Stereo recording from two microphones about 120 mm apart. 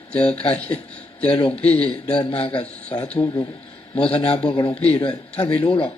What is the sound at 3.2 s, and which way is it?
Speech, 35° left (ahead or behind).